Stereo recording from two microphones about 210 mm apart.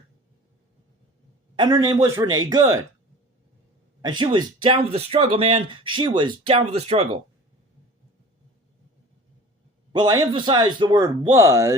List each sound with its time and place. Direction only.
1.5 s a man's voice: 20° right (ahead or behind)
4.0 s speech: 20° right (ahead or behind)
9.9 s speech: 20° right (ahead or behind)